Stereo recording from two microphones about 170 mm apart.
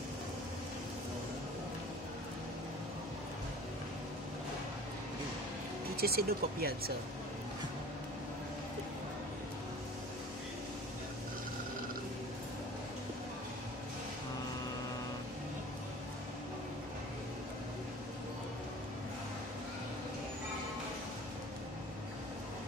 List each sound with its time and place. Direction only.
5.9 s speech: 65° right (ahead or behind)